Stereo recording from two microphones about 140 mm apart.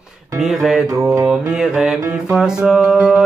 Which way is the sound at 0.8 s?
25° right (ahead or behind).